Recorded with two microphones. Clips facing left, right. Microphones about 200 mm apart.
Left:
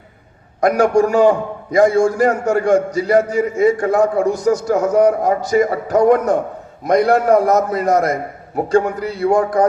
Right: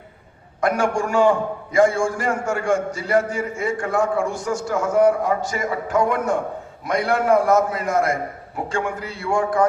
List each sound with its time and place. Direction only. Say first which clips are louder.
0.6 s a man's voice: left 7 dB; 40° left (ahead or behind)